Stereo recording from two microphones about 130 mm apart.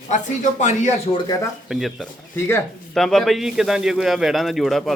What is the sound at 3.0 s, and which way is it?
A man's voice, 5° left (ahead or behind).